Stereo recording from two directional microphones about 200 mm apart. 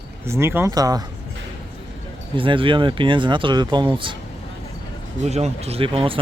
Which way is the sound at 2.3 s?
25° right (ahead or behind).